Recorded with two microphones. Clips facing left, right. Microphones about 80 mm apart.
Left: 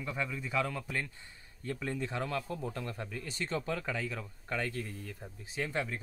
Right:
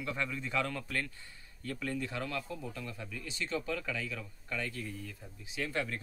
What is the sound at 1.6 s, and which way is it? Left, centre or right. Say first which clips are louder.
Speech: left 1 dB; left.